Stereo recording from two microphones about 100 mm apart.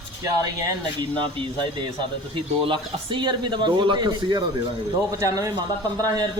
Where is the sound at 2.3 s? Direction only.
60° right (ahead or behind).